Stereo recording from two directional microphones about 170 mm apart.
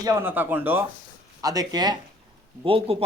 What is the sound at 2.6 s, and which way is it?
Speech, 35° right (ahead or behind).